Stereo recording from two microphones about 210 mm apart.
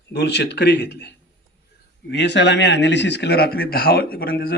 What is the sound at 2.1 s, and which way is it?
Speech, 55° left (ahead or behind).